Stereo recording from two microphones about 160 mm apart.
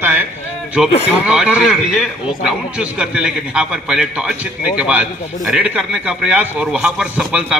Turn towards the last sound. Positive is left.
turn(degrees=-5)  # may be behind; listen again after turning